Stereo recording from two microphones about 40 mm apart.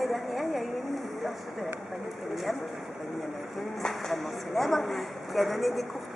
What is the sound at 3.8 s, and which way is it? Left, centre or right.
Speech, centre.